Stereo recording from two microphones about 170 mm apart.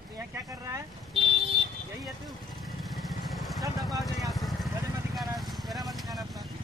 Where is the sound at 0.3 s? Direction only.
20° right (ahead or behind).